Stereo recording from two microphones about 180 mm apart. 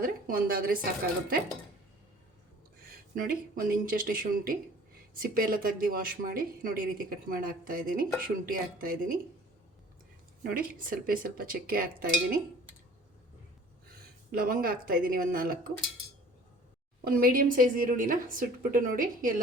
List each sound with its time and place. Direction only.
0.0 s speech: 50° right (ahead or behind)
3.2 s speech: 50° right (ahead or behind)
10.8 s speech: 50° right (ahead or behind)
14.3 s speech: 55° right (ahead or behind)
17.0 s speech: 55° right (ahead or behind)